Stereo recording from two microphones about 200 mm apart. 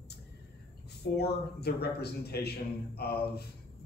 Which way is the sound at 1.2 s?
55° left (ahead or behind).